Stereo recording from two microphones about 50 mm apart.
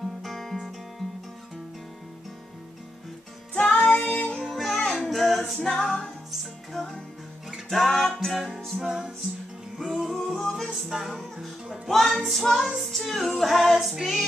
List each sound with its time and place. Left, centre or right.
0.2 s music: centre
3.5 s music: left
3.8 s female singing: centre
4.1 s music: centre
4.4 s music: centre
5.0 s singing: centre
5.7 s music: centre
8.8 s music: centre
10.5 s female singing: centre
12.7 s child singing: centre
13.4 s female singing: centre